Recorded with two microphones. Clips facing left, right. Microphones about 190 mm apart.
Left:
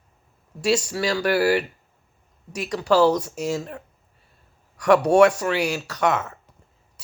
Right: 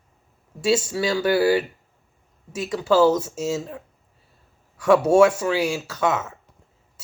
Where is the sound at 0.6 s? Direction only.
20° right (ahead or behind).